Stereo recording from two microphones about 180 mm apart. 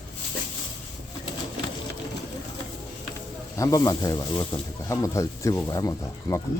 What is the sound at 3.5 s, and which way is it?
Speech, 20° left (ahead or behind).